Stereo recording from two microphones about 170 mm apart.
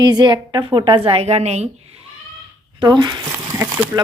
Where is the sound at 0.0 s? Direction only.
25° right (ahead or behind).